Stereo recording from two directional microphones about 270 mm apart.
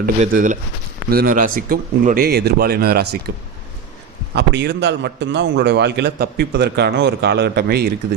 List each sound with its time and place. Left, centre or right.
0.0 s a man's voice: right
4.4 s a man's voice: right